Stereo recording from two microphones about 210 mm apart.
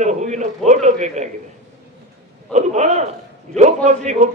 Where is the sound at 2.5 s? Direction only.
35° right (ahead or behind).